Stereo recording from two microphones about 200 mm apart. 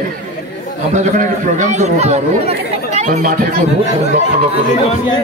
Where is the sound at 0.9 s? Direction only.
40° right (ahead or behind).